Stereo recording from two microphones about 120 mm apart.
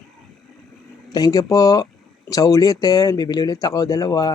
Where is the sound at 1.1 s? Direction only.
30° left (ahead or behind).